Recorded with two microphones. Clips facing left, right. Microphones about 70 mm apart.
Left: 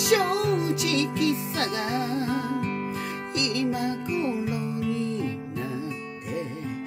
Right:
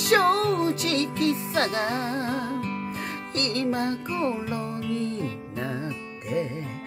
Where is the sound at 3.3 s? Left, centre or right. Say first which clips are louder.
Even; right.